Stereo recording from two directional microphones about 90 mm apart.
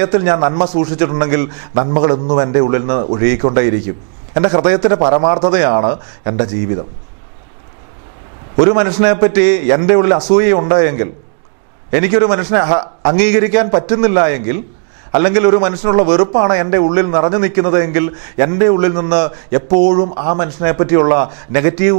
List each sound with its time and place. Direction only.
0.0 s a man's voice: 15° right (ahead or behind)
8.5 s a man's voice: 15° right (ahead or behind)